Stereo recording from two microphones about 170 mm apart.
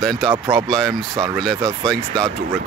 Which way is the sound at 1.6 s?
5° left (ahead or behind).